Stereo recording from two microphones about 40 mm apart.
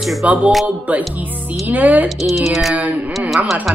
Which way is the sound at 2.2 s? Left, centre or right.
Centre.